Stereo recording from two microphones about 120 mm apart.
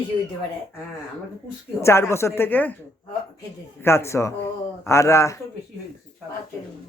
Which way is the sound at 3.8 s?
20° left (ahead or behind).